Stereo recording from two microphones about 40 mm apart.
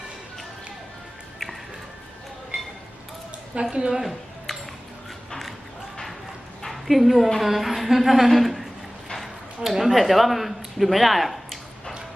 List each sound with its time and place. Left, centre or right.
3.6 s a woman's voice: right
6.7 s a woman's voice: centre
9.0 s a sound: centre